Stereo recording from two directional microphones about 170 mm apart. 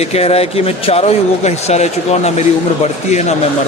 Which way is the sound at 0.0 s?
35° left (ahead or behind).